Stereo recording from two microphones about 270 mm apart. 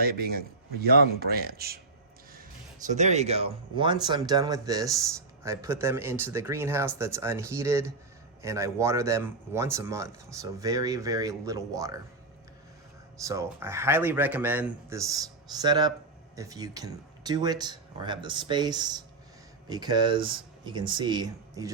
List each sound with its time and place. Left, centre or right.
0.0 s a man's voice: right
2.8 s speech: right
13.1 s speech: centre